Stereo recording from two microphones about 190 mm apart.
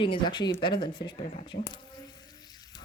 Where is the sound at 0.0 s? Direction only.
25° left (ahead or behind).